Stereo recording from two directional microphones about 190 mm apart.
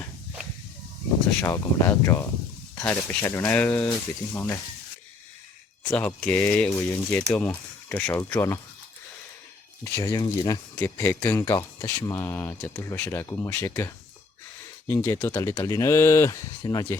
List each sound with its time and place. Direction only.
1.4 s speech: 15° left (ahead or behind)
5.9 s speech: 10° left (ahead or behind)
9.8 s speech: 15° left (ahead or behind)